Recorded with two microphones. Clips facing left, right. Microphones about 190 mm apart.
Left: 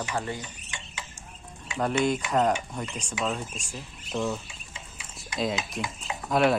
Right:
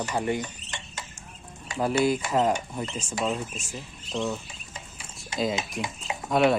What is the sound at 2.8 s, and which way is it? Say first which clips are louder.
Speech: right 2 dB; 5° right (ahead or behind).